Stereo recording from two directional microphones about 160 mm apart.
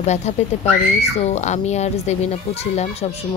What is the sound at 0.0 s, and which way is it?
Speech, 45° left (ahead or behind).